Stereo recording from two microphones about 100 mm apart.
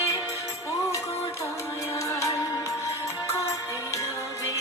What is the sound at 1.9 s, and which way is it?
Music, 30° left (ahead or behind).